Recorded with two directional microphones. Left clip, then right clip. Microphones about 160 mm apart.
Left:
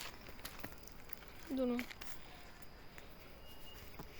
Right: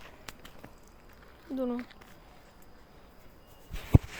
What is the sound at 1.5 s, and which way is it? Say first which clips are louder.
Speech: right 4 dB; 10° right (ahead or behind).